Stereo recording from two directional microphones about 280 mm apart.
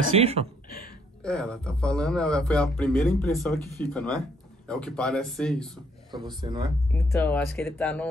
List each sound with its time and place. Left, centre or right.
0.2 s speech: right
1.2 s speech: centre
6.1 s speech: centre
6.9 s speech: centre